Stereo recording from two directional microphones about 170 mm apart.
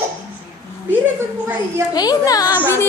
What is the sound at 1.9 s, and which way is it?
Speech, 20° left (ahead or behind).